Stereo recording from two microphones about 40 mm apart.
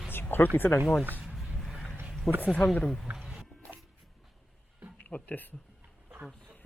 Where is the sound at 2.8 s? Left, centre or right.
Centre.